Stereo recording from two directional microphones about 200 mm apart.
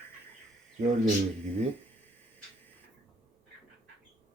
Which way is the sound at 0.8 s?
35° right (ahead or behind).